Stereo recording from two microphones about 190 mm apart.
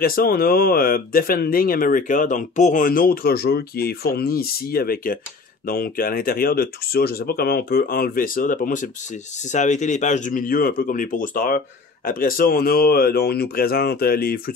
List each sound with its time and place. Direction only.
0.0 s speech: 50° left (ahead or behind)